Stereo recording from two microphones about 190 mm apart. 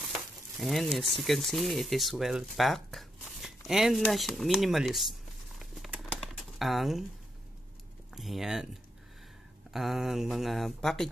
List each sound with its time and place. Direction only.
0.1 s speech: centre (ahead or behind)
5.6 s patter: centre (ahead or behind)
6.6 s speech: centre (ahead or behind)
8.1 s speech: centre (ahead or behind)
9.7 s speech: centre (ahead or behind)